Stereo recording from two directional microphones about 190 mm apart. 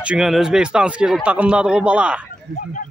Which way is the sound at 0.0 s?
5° right (ahead or behind).